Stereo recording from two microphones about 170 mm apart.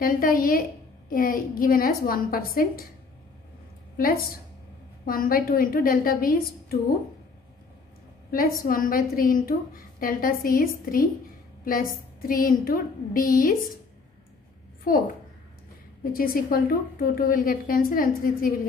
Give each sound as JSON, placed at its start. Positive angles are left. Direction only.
{"t": 0.0, "sound": "a woman's voice", "side_deg": 55}
{"t": 3.9, "sound": "a woman's voice", "side_deg": 60}
{"t": 8.3, "sound": "a woman's voice", "side_deg": 60}
{"t": 16.0, "sound": "a woman's voice", "side_deg": 60}